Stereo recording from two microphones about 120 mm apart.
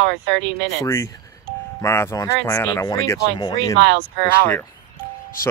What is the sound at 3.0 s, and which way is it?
Speech, 30° left (ahead or behind).